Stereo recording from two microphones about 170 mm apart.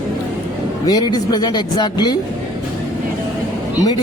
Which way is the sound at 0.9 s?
25° left (ahead or behind).